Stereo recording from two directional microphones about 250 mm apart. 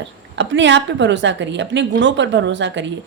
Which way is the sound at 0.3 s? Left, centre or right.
Right.